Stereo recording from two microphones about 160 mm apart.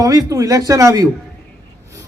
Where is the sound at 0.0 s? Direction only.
20° right (ahead or behind).